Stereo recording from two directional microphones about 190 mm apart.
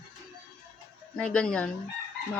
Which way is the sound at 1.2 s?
5° left (ahead or behind).